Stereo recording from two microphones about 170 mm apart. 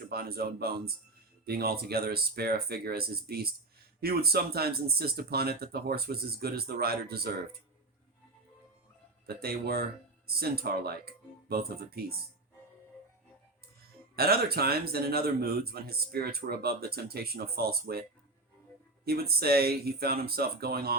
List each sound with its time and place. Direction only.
0.1 s speech: 65° right (ahead or behind)
9.2 s speech: 65° right (ahead or behind)
14.2 s speech: 65° right (ahead or behind)
19.0 s speech: 65° right (ahead or behind)